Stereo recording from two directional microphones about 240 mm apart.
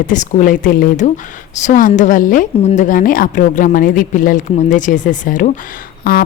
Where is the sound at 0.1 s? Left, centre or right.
Left.